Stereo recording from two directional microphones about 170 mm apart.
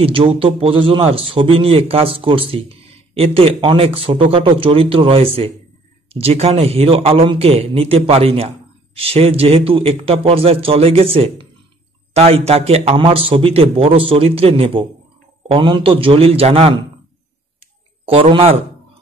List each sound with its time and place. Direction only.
0.0 s a man's voice: 35° right (ahead or behind)
18.0 s a man's voice: 30° right (ahead or behind)